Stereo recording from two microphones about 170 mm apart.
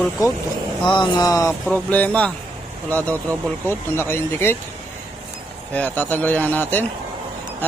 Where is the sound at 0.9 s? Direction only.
25° left (ahead or behind).